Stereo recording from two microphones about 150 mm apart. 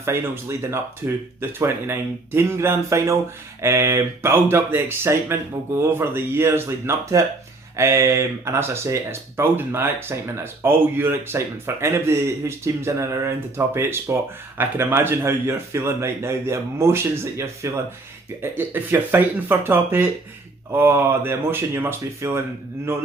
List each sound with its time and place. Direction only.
0.0 s speech: 15° right (ahead or behind)